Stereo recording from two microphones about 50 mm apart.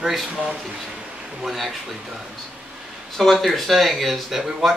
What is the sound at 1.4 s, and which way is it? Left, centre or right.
Speech, centre.